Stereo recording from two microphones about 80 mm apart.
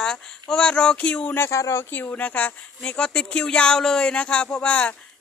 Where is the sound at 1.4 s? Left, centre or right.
Left.